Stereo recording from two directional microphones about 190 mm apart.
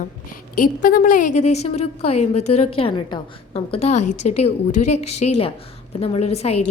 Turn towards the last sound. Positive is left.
turn(degrees=35)  # may be behind; listen again after turning